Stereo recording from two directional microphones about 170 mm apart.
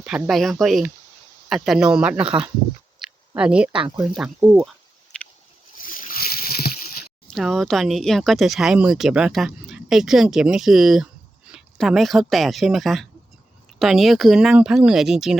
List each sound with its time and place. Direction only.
0.0 s speech: centre (ahead or behind)
3.0 s a sound: 5° right (ahead or behind)
3.9 s speech: centre (ahead or behind)
5.8 s boat: 55° left (ahead or behind)
7.3 s speech: centre (ahead or behind)